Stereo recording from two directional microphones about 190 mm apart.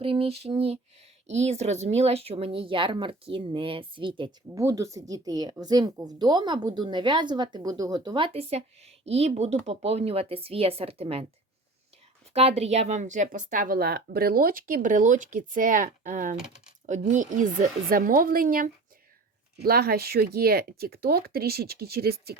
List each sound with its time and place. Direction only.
0.0 s speech: 30° right (ahead or behind)
12.3 s speech: 30° right (ahead or behind); by 22.4 s 55° right (ahead or behind)